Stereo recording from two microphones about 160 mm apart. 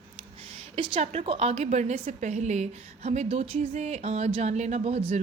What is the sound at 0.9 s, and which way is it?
A woman's voice, 45° right (ahead or behind).